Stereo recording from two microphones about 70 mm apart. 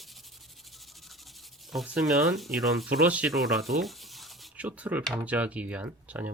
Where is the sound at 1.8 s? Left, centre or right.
Centre.